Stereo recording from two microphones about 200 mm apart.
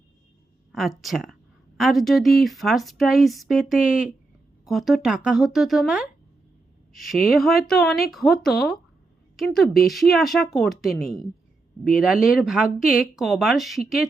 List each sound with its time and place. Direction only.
0.7 s speech: centre (ahead or behind)